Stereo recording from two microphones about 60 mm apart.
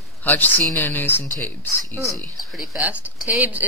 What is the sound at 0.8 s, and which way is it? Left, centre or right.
Speech, left.